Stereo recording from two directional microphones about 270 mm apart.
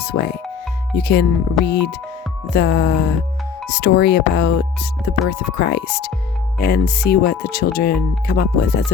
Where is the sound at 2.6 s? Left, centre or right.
Left.